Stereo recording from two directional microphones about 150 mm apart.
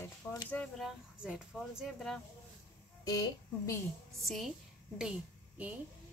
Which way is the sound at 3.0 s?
25° left (ahead or behind).